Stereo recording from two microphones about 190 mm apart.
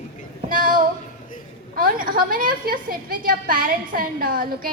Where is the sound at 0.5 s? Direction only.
45° right (ahead or behind).